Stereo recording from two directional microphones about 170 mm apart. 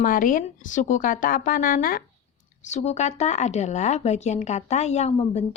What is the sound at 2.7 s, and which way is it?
Speech, 40° left (ahead or behind).